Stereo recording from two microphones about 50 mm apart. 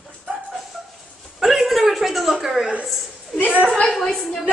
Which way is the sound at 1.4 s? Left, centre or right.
Centre.